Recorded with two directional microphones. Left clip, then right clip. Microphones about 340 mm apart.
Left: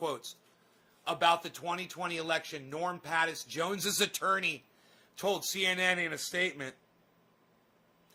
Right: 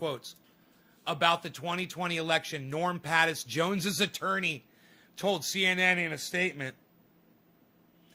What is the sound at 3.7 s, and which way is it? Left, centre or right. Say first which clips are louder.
A man's voice: right 1 dB; centre.